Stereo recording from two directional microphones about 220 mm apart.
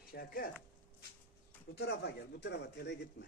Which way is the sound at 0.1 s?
40° left (ahead or behind).